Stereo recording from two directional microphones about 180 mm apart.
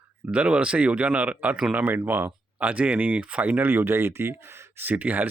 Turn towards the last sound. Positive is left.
turn(degrees=-10)  # may be behind; listen again after turning